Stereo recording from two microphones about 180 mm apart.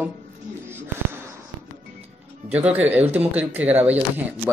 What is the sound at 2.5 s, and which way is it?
Speech, 10° right (ahead or behind).